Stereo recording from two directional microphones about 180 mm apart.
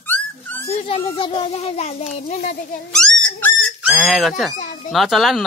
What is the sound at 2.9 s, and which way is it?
A child's voice, 5° left (ahead or behind).